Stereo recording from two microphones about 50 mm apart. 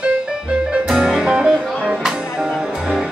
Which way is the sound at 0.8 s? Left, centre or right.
Centre.